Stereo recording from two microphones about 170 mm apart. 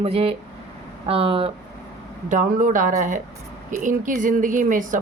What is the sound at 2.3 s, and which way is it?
Speech, 50° right (ahead or behind).